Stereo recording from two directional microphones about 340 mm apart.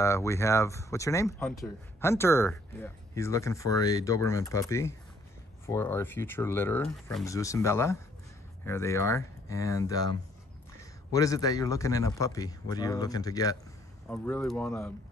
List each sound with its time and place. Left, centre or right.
0.0 s speech: centre